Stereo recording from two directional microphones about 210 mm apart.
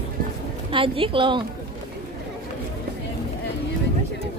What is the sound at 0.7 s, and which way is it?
Speech, 25° right (ahead or behind).